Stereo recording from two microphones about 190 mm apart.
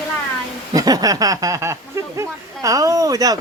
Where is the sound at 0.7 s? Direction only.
20° right (ahead or behind).